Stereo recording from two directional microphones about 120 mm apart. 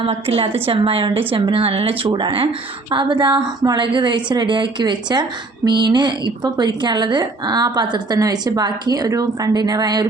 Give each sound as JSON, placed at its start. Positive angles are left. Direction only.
{"t": 0.0, "sound": "a woman's voice", "side_deg": -50}